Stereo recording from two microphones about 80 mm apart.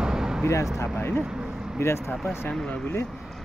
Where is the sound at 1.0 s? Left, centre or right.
Left.